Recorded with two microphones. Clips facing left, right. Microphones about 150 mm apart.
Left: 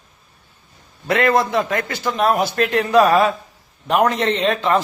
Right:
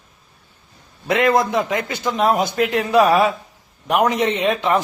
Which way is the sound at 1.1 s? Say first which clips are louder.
Even; 15° right (ahead or behind).